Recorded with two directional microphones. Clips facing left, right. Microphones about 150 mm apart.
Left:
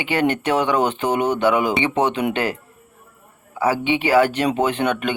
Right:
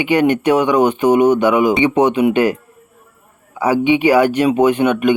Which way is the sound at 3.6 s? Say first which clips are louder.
Right 6 dB; 15° right (ahead or behind).